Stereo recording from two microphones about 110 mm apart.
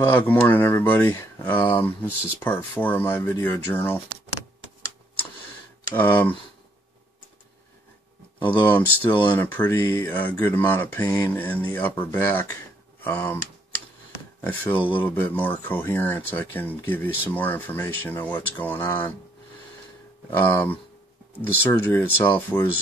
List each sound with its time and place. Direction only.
0.0 s speech: 20° left (ahead or behind)
5.9 s speech: 20° left (ahead or behind)
8.5 s speech: 20° left (ahead or behind)
14.4 s speech: 15° left (ahead or behind)
20.2 s speech: 20° left (ahead or behind)